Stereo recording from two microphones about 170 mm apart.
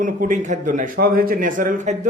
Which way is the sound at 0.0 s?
50° right (ahead or behind).